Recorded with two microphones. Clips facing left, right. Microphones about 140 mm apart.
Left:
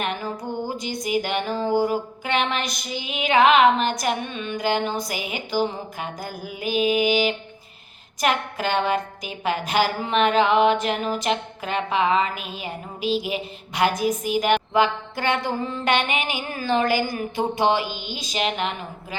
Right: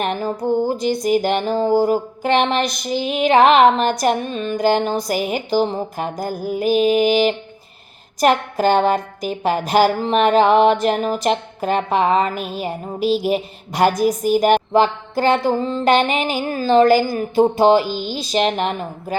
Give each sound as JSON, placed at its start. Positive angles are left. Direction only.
{"t": 0.0, "sound": "music", "side_deg": -40}
{"t": 1.0, "sound": "a woman's voice", "side_deg": -40}